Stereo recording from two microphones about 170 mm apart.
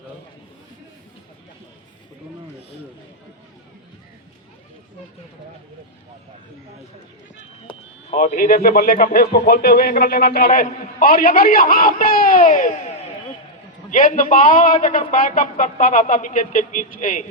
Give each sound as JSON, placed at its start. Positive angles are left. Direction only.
{"t": 8.1, "sound": "speech", "side_deg": 50}
{"t": 13.9, "sound": "a man's voice", "side_deg": 50}